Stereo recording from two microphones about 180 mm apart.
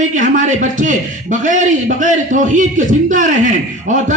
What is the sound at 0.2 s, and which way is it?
A man's voice, 45° right (ahead or behind).